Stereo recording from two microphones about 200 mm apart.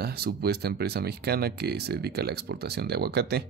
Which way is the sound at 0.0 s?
50° right (ahead or behind).